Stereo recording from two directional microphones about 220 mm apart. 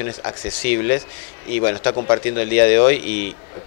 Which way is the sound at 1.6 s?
20° left (ahead or behind).